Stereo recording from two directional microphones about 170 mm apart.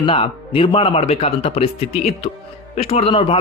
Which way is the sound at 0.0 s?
30° left (ahead or behind).